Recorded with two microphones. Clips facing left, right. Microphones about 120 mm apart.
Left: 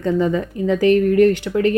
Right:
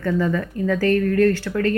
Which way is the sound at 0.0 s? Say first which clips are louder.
Left 3 dB; 20° left (ahead or behind).